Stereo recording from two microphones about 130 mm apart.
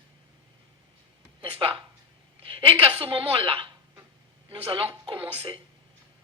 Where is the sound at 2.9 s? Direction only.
45° right (ahead or behind).